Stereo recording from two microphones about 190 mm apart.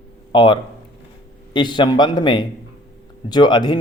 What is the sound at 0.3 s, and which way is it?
A man's voice, 20° left (ahead or behind).